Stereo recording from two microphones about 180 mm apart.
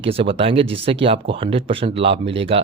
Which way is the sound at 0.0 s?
30° right (ahead or behind).